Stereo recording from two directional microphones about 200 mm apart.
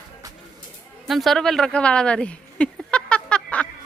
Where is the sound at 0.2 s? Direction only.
20° right (ahead or behind).